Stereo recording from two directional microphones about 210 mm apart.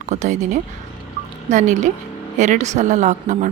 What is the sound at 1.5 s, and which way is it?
A woman's voice, 35° right (ahead or behind).